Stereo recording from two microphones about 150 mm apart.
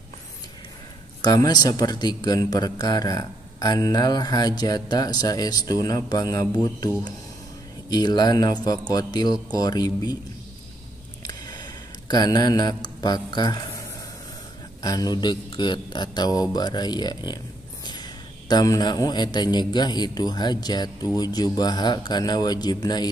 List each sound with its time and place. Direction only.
1.2 s a man's voice: 25° left (ahead or behind)
7.9 s a man's voice: 30° left (ahead or behind)
11.2 s a sound: 30° left (ahead or behind)
14.8 s a man's voice: 25° left (ahead or behind)